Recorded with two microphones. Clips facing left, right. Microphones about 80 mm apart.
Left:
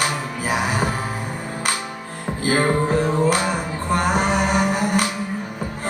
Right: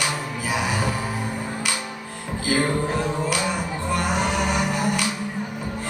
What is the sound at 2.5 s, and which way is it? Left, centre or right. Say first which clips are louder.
Music: left 3 dB; left.